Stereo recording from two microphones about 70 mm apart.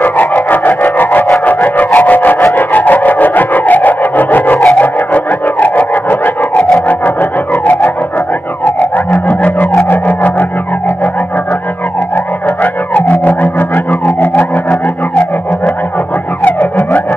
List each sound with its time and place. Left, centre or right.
0.0 s music: left
9.8 s music: left
12.9 s music: left
16.5 s music: left